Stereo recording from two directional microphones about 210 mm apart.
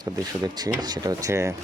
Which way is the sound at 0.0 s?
20° right (ahead or behind).